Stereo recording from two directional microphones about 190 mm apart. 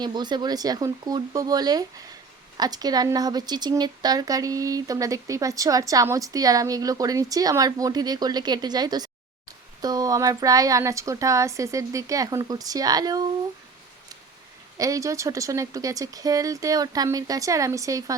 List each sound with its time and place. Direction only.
0.0 s speech: 20° right (ahead or behind)
14.8 s speech: 15° right (ahead or behind)